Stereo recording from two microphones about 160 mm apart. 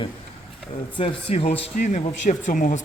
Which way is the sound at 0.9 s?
35° left (ahead or behind).